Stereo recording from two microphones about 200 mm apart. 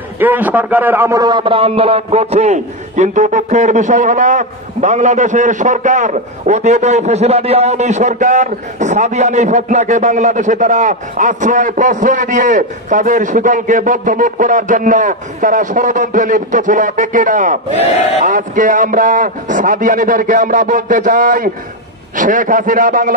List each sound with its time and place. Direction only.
0.2 s a man's voice: 10° right (ahead or behind); by 23.1 s 40° right (ahead or behind)